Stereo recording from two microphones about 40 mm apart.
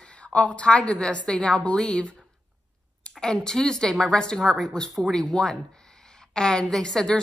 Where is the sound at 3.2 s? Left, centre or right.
Centre.